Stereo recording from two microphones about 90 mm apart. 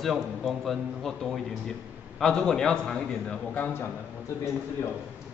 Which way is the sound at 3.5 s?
20° left (ahead or behind).